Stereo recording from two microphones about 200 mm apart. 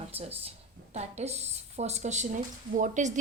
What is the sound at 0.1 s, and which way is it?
A woman's voice, 30° right (ahead or behind).